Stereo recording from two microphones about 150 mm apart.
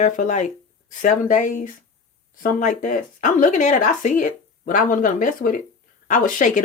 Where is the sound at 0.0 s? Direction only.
50° left (ahead or behind).